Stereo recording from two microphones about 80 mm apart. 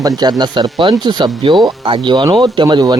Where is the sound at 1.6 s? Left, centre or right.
Right.